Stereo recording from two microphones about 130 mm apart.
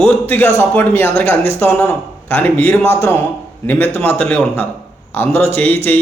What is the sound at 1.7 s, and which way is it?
Speech, 15° left (ahead or behind).